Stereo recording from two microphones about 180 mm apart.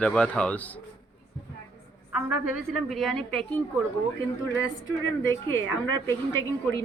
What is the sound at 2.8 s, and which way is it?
Speech, centre (ahead or behind).